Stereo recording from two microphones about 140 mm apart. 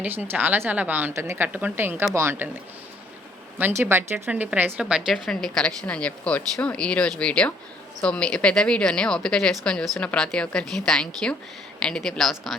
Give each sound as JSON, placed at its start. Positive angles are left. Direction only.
{"t": 0.0, "sound": "a woman's voice", "side_deg": -15}
{"t": 3.6, "sound": "speech", "side_deg": -15}